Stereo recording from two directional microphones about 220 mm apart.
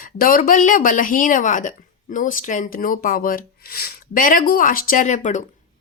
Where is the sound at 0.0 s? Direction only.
40° left (ahead or behind).